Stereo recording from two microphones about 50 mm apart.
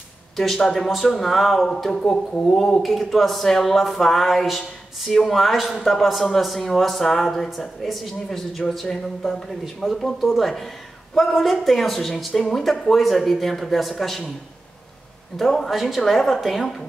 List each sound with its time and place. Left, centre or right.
0.4 s speech: centre
1.7 s speech: centre
15.3 s speech: centre